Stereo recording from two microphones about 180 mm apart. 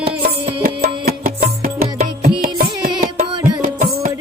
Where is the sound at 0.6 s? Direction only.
55° right (ahead or behind).